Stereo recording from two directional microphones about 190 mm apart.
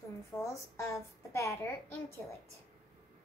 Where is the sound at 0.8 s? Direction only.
15° left (ahead or behind).